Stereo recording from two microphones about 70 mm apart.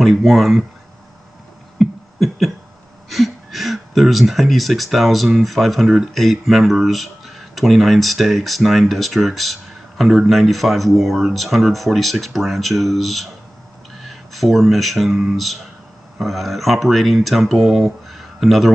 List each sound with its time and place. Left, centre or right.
0.0 s speech: centre
1.8 s a sound: centre
3.1 s speech: centre